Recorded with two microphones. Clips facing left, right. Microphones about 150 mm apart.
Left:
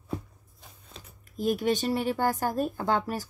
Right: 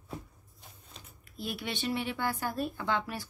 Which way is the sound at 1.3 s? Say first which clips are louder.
Left 11 dB; 40° left (ahead or behind).